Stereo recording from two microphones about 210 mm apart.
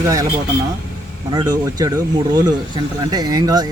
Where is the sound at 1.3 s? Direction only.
20° right (ahead or behind).